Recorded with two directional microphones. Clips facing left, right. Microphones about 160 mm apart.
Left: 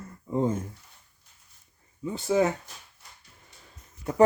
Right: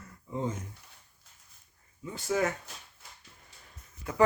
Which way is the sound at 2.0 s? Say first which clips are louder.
Left 6 dB; 25° left (ahead or behind).